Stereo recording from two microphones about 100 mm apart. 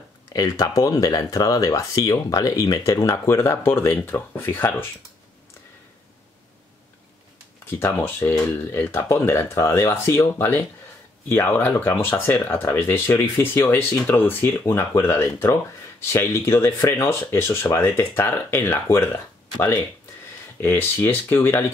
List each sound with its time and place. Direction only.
0.3 s speech: 35° left (ahead or behind)
7.8 s speech: 25° left (ahead or behind)
20.6 s speech: 25° left (ahead or behind)